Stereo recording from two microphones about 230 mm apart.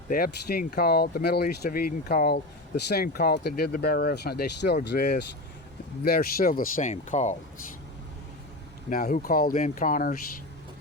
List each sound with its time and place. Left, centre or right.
0.1 s speech: left
8.9 s speech: left